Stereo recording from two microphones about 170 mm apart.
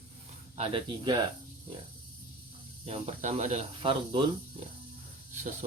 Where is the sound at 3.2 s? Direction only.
45° right (ahead or behind).